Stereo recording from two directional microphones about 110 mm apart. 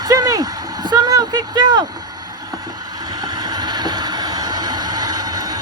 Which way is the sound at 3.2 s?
35° right (ahead or behind).